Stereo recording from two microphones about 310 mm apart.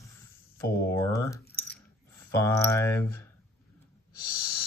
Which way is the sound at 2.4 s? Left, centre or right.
Centre.